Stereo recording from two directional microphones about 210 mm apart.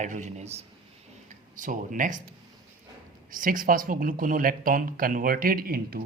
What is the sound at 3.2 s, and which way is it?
Speech, 40° right (ahead or behind).